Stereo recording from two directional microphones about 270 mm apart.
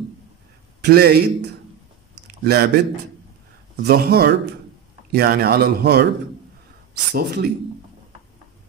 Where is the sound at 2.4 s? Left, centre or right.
Right.